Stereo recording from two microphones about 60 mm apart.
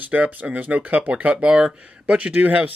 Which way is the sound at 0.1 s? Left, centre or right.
Right.